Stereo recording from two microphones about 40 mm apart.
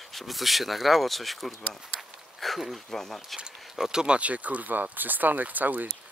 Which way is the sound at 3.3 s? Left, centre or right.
Centre.